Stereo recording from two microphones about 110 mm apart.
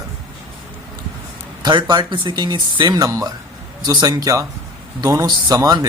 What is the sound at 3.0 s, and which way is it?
A man's voice, 30° right (ahead or behind).